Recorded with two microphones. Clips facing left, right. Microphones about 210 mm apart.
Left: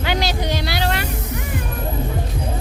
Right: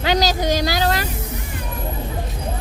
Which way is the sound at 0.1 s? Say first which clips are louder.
Right 4 dB; 40° right (ahead or behind).